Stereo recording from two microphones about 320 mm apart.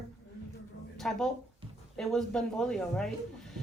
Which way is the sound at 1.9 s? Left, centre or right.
Centre.